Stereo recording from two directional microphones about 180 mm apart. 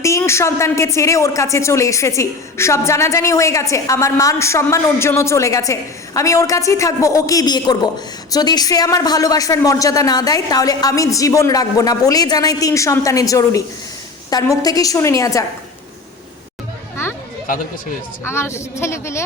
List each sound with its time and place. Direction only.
0.0 s a woman's voice: 15° left (ahead or behind)
18.3 s a woman's voice: 15° left (ahead or behind)